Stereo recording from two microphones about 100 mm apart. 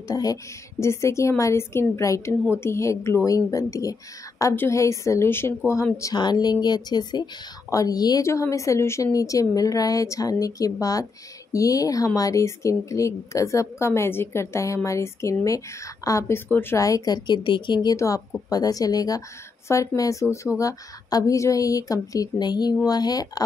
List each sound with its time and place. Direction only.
0.1 s a woman's voice: 40° left (ahead or behind)
6.1 s a woman's voice: 45° left (ahead or behind); by 16.7 s 20° left (ahead or behind)
16.7 s a woman's voice: 35° left (ahead or behind); by 17.9 s 55° left (ahead or behind)
17.9 s speech: 35° left (ahead or behind)